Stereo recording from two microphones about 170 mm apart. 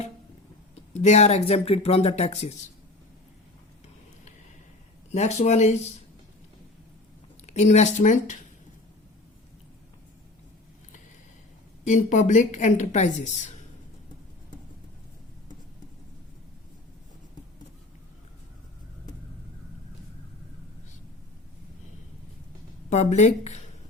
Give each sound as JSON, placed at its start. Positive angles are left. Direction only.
{"t": 0.9, "sound": "speech", "side_deg": 40}
{"t": 5.1, "sound": "speech", "side_deg": 40}
{"t": 7.4, "sound": "a woman's voice", "side_deg": 40}
{"t": 11.9, "sound": "a woman's voice", "side_deg": 50}
{"t": 22.9, "sound": "speech", "side_deg": 40}